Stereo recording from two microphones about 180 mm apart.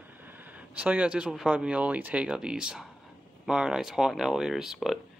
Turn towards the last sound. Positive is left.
turn(degrees=0)  # may be behind; listen again after turning